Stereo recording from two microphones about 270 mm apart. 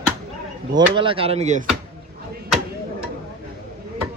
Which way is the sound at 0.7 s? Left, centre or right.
Centre.